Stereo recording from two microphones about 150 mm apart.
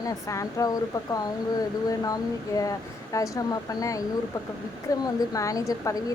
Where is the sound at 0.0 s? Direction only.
20° left (ahead or behind).